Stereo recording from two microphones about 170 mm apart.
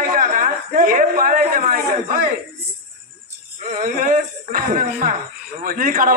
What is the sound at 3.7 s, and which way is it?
A woman's voice, 50° right (ahead or behind).